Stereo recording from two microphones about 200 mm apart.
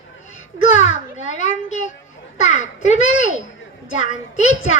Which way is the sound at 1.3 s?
35° left (ahead or behind).